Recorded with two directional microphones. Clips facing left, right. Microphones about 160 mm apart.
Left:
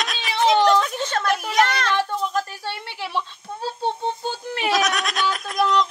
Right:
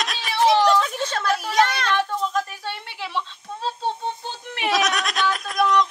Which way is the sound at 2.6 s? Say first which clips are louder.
Left 1 dB; 10° left (ahead or behind).